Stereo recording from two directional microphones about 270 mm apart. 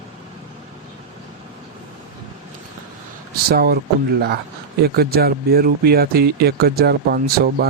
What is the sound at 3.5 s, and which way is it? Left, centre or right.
Speech, right.